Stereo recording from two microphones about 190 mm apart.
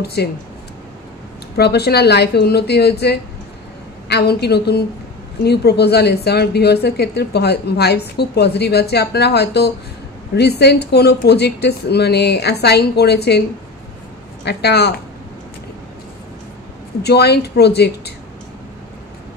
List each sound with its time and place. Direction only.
0.0 s a woman's voice: 55° left (ahead or behind)
1.6 s a woman's voice: 60° left (ahead or behind)
14.4 s a woman's voice: 60° left (ahead or behind)
17.0 s a woman's voice: 60° left (ahead or behind)